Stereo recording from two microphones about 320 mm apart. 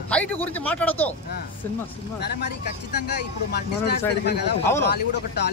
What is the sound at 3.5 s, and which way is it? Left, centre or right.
Speech, left.